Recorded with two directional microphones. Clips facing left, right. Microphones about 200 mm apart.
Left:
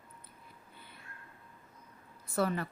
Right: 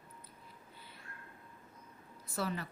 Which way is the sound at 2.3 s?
55° left (ahead or behind).